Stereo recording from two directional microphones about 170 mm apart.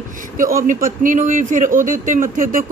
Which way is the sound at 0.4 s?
55° right (ahead or behind).